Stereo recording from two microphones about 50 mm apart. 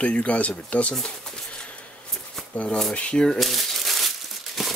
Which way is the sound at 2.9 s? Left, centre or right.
Left.